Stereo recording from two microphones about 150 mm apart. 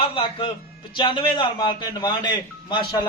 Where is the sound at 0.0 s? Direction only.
35° left (ahead or behind).